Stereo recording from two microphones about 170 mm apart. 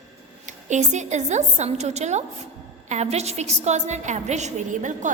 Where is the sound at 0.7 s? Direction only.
45° right (ahead or behind).